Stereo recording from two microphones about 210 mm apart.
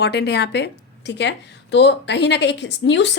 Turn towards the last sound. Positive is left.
turn(degrees=55)  # may be behind; listen again after turning